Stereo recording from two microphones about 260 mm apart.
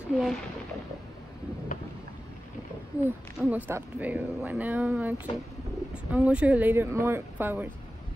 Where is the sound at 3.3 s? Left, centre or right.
Centre.